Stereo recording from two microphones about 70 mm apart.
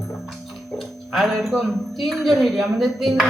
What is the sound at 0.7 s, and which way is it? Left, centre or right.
Speech, centre.